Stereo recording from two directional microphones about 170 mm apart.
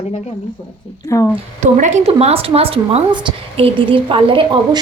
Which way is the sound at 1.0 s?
20° left (ahead or behind).